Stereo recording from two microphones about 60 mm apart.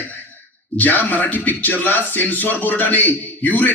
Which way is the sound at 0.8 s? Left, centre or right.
Left.